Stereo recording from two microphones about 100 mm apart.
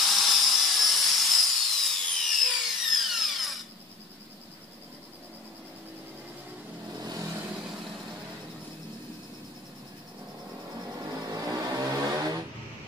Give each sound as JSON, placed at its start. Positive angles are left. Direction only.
{"t": 0.0, "sound": "sawing", "side_deg": 0}
{"t": 7.1, "sound": "vehicle", "side_deg": -35}
{"t": 11.3, "sound": "vehicle", "side_deg": -35}